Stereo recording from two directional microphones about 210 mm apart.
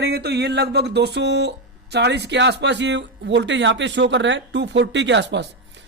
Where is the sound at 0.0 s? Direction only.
50° right (ahead or behind).